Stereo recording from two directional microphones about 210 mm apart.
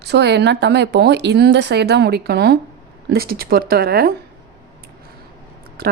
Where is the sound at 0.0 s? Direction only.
50° right (ahead or behind).